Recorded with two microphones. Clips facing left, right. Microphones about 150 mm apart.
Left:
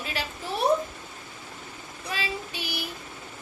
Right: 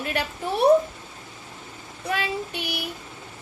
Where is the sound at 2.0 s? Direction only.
60° right (ahead or behind).